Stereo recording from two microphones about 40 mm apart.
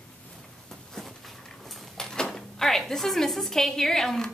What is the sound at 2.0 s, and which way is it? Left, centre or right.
A woman's voice, centre.